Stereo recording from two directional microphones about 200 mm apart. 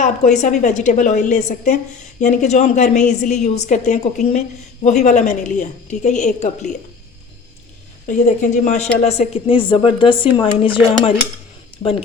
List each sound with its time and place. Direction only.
0.0 s a woman's voice: 35° left (ahead or behind)
8.0 s a woman's voice: 40° left (ahead or behind)
11.8 s speech: 30° left (ahead or behind)